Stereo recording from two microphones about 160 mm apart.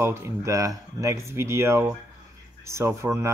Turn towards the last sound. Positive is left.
turn(degrees=-20)  # may be behind; listen again after turning